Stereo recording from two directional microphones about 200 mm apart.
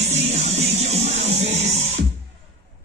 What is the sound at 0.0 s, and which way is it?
Music, 35° right (ahead or behind).